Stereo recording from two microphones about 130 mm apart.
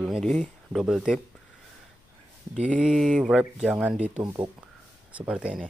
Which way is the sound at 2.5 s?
75° right (ahead or behind).